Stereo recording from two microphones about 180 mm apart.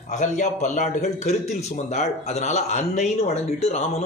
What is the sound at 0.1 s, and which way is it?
A man's voice, 40° left (ahead or behind).